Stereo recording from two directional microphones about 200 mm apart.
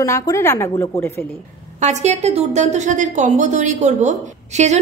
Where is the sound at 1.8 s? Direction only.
35° right (ahead or behind).